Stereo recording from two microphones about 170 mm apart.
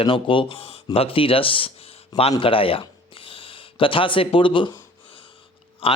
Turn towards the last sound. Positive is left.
turn(degrees=35)  # may be behind; listen again after turning